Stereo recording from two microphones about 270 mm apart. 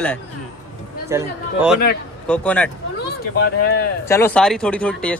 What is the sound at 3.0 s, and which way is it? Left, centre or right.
Speech, left.